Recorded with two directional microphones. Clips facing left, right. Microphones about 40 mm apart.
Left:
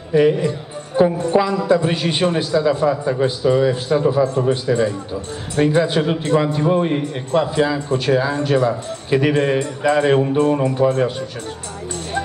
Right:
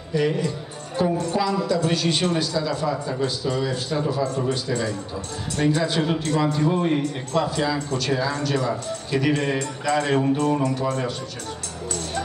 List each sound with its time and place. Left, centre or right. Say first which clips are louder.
0.1 s a man's voice: left 8 dB; left